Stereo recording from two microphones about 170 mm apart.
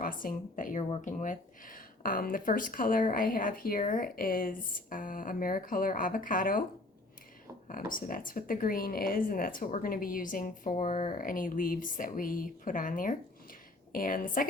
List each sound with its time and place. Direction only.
0.0 s speech: 55° left (ahead or behind)
7.7 s speech: 55° left (ahead or behind)